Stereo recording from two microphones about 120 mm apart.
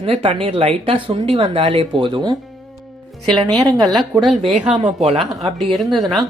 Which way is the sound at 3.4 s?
35° right (ahead or behind).